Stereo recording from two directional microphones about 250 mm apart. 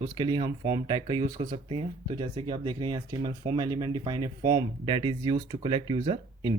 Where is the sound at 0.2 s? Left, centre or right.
Centre.